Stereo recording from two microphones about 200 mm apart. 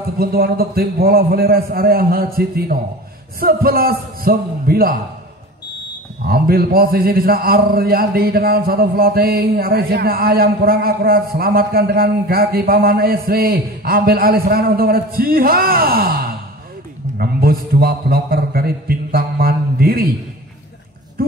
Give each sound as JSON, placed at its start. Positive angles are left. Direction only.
{"t": 0.2, "sound": "a man's voice", "side_deg": -50}
{"t": 6.2, "sound": "a man's voice", "side_deg": -50}